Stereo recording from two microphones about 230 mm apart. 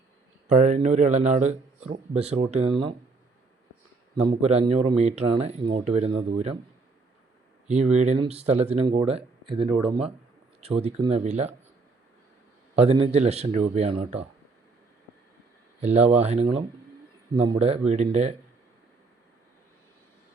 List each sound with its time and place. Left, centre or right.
0.4 s a man's voice: right
4.3 s a man's voice: right
7.7 s a man's voice: right
12.7 s a man's voice: right
15.9 s a man's voice: right